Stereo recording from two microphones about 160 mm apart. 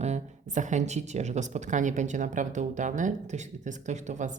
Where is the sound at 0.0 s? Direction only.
45° right (ahead or behind).